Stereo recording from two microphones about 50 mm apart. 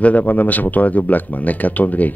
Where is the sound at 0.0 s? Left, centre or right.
Left.